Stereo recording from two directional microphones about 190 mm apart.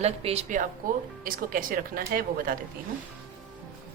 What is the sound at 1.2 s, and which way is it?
A woman's voice, 45° right (ahead or behind).